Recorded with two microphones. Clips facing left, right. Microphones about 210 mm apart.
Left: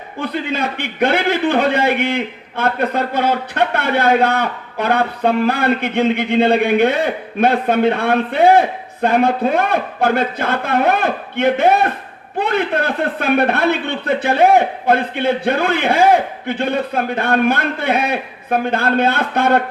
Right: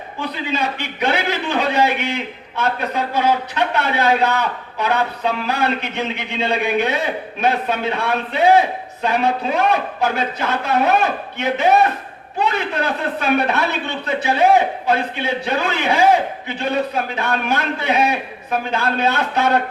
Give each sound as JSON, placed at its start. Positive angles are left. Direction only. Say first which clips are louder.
{"t": 0.2, "sound": "a man's voice", "louder": "left 3 dB", "side_deg": 55}